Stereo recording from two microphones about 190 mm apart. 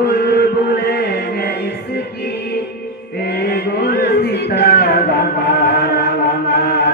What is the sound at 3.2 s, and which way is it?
Chant, 60° left (ahead or behind).